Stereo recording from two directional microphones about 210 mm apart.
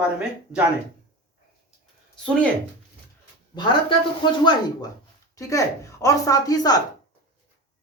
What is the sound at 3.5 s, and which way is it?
Speech, 20° left (ahead or behind).